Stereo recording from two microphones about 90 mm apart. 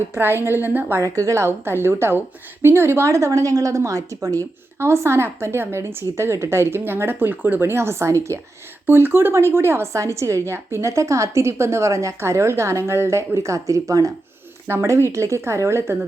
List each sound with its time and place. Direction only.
0.1 s a woman's voice: 25° right (ahead or behind)
1.0 s a woman's voice: 35° right (ahead or behind)